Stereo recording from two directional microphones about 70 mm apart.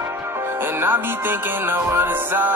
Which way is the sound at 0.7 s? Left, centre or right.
Right.